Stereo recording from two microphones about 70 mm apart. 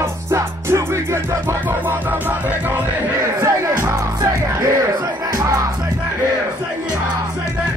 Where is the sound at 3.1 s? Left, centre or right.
Right.